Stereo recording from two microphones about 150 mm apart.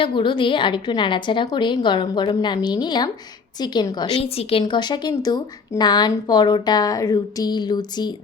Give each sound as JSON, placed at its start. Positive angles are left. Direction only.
{"t": 0.0, "sound": "a woman's voice", "side_deg": 35}
{"t": 4.2, "sound": "a woman's voice", "side_deg": 40}
{"t": 4.6, "sound": "speech", "side_deg": 30}